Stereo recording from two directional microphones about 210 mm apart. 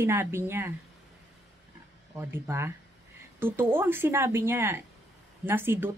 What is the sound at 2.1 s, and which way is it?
A woman's voice, 10° right (ahead or behind).